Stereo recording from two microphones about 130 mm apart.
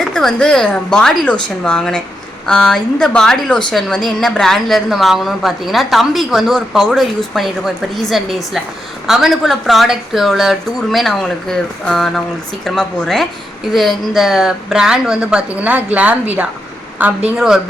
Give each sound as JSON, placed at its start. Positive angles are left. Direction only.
{"t": 0.0, "sound": "a woman's voice", "side_deg": 5}